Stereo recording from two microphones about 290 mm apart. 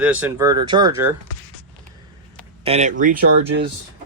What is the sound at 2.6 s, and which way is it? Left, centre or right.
Speech, right.